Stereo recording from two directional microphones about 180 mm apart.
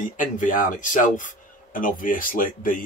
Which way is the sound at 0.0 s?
45° left (ahead or behind).